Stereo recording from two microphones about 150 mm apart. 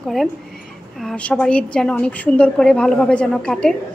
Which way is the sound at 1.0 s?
10° left (ahead or behind).